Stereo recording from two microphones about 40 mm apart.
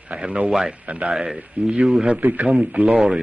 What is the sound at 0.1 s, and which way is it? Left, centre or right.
Speech, right.